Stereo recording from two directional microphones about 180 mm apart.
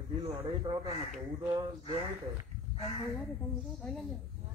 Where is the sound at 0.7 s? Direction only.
25° right (ahead or behind).